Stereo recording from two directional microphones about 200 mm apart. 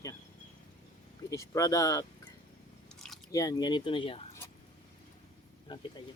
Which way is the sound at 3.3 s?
15° left (ahead or behind).